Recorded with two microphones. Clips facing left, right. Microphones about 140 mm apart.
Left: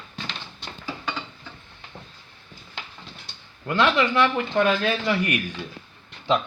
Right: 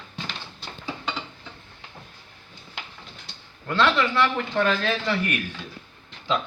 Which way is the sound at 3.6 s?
15° left (ahead or behind).